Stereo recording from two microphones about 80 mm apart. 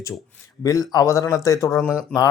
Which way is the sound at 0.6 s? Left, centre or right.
Left.